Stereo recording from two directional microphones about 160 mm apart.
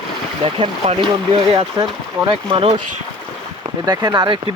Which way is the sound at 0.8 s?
45° right (ahead or behind).